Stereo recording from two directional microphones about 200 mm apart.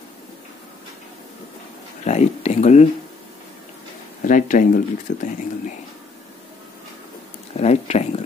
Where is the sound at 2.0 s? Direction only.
35° left (ahead or behind).